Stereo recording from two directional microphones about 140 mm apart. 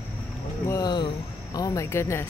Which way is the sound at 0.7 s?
30° left (ahead or behind).